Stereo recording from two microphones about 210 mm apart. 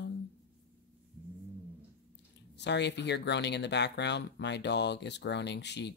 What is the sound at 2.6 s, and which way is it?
Speech, 55° left (ahead or behind).